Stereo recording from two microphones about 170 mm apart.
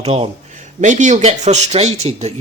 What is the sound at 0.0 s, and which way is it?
Speech, 35° right (ahead or behind).